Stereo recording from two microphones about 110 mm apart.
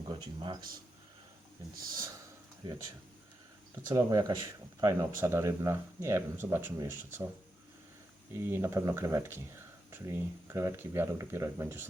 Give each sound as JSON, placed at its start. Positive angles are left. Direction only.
{"t": 0.1, "sound": "a man's voice", "side_deg": -50}
{"t": 3.8, "sound": "speech", "side_deg": -30}
{"t": 8.3, "sound": "speech", "side_deg": -25}